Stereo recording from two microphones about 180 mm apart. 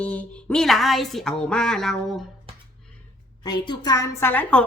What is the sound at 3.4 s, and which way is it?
Speech, 25° left (ahead or behind).